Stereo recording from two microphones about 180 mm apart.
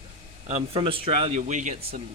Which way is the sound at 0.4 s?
35° right (ahead or behind).